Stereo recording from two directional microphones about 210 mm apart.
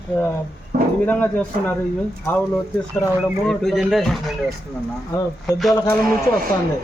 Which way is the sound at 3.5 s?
Centre (ahead or behind).